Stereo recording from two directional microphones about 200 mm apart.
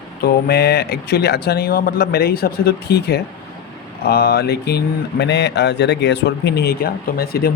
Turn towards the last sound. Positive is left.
turn(degrees=50)  # may be behind; listen again after turning